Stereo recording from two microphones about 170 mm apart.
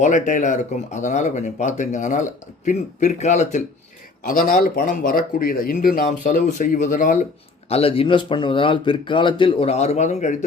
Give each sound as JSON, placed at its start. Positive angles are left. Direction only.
{"t": 0.0, "sound": "speech", "side_deg": 45}
{"t": 4.3, "sound": "speech", "side_deg": 55}
{"t": 7.7, "sound": "speech", "side_deg": 35}